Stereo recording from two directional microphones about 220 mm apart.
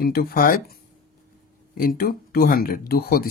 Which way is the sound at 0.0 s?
45° left (ahead or behind).